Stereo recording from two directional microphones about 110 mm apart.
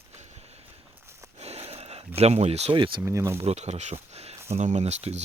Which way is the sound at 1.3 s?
70° right (ahead or behind).